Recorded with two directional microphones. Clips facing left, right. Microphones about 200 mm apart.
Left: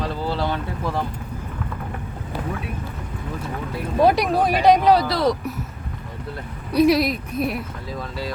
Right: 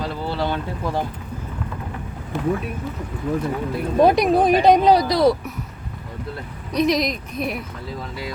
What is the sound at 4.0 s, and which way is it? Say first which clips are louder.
Speech: right 2 dB; 20° right (ahead or behind).